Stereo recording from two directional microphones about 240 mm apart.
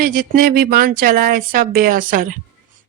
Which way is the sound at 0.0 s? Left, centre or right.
Right.